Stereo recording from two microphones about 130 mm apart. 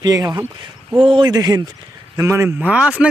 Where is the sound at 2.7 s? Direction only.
10° right (ahead or behind).